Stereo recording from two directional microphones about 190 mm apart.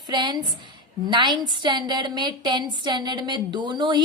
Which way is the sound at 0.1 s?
25° right (ahead or behind).